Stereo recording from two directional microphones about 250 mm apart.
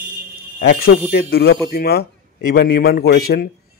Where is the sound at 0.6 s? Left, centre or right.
Left.